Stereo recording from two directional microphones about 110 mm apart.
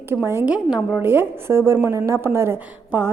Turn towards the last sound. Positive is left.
turn(degrees=-20)  # may be behind; listen again after turning